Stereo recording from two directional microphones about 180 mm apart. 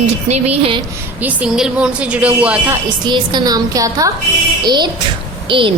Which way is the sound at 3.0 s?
25° right (ahead or behind).